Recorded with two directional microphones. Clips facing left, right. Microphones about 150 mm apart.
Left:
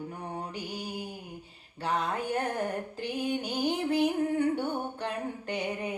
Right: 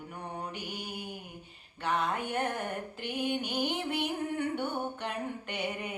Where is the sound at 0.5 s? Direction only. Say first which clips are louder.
Left 3 dB; 35° left (ahead or behind).